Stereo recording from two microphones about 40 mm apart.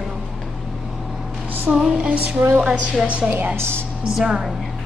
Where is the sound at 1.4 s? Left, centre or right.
Right.